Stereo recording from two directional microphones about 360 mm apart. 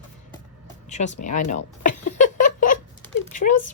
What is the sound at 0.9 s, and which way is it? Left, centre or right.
Speech, centre.